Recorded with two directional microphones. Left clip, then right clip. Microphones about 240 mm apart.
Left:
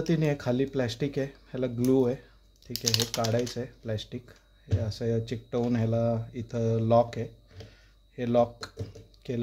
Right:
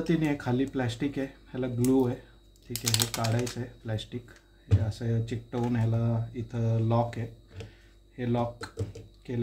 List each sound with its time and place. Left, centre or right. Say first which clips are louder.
0.0 s speech: left 1 dB; left
2.7 s speech: left 2 dB; centre
3.5 s speech: left 3 dB; left